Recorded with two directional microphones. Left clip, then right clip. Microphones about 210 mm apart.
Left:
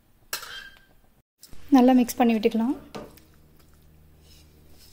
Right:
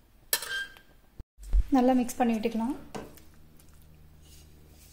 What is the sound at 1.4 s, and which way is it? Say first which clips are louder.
Speech: left 6 dB; 40° left (ahead or behind).